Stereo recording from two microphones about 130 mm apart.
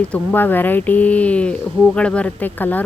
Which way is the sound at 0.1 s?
15° left (ahead or behind).